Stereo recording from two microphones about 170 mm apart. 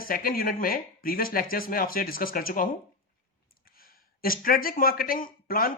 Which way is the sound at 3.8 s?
60° left (ahead or behind).